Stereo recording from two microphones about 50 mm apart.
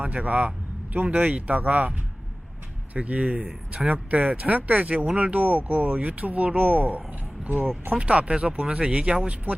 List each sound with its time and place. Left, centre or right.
0.0 s speech: right
2.9 s speech: right